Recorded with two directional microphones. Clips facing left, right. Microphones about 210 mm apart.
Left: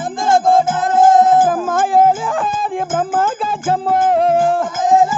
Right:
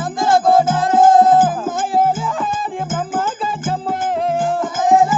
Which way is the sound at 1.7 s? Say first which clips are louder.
Left 7 dB; 80° left.